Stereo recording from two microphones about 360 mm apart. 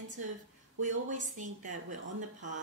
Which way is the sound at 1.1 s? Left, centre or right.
Right.